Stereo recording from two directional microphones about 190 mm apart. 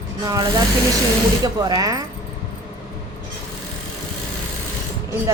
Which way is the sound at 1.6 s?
20° right (ahead or behind).